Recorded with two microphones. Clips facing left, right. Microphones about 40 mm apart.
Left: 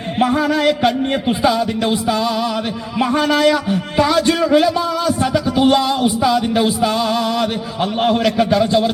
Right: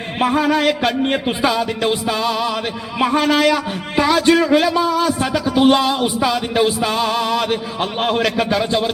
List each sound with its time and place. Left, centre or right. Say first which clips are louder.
0.2 s music: left 1 dB; right
0.5 s a man's voice: left 1 dB; centre